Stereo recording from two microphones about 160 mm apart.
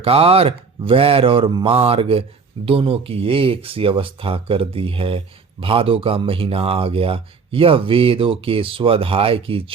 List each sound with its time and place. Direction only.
0.0 s speech: 35° right (ahead or behind)